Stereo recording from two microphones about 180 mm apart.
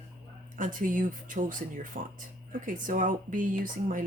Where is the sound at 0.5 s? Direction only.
45° right (ahead or behind).